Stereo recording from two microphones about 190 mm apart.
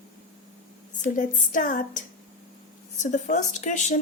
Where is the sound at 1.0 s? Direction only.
45° left (ahead or behind).